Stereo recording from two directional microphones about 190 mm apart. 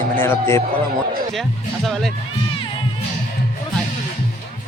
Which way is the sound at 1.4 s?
Centre (ahead or behind).